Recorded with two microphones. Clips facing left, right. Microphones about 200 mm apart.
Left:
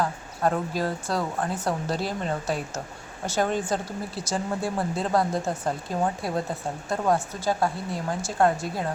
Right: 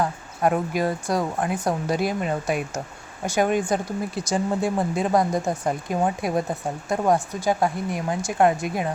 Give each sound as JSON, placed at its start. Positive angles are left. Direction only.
{"t": 0.0, "sound": "speech", "side_deg": -15}